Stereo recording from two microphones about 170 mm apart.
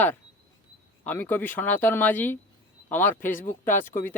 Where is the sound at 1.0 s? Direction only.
10° left (ahead or behind).